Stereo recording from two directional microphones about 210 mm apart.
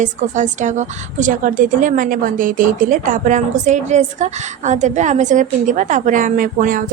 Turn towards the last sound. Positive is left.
turn(degrees=-40)  # may be behind; listen again after turning